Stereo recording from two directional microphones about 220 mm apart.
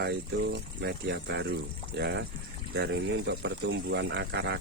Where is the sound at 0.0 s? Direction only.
50° right (ahead or behind).